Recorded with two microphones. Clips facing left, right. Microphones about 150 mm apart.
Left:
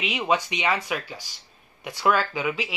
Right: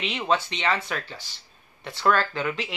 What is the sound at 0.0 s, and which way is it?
Speech, 10° left (ahead or behind).